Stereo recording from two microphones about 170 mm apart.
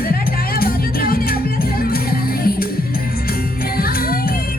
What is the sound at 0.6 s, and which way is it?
Music, 60° left (ahead or behind).